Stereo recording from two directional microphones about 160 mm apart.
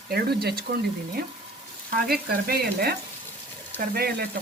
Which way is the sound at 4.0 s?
75° right (ahead or behind).